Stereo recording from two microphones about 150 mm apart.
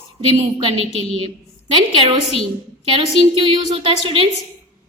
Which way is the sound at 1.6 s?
35° right (ahead or behind).